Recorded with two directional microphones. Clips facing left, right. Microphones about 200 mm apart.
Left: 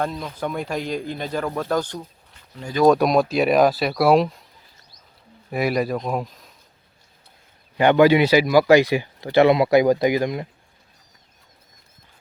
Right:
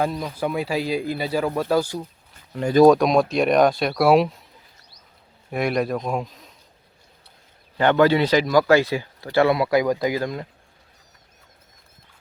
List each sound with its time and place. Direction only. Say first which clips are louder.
0.0 s speech: right 2 dB; centre (ahead or behind)
5.5 s speech: left 1 dB; 5° left (ahead or behind)
7.8 s speech: left 2 dB; 15° left (ahead or behind)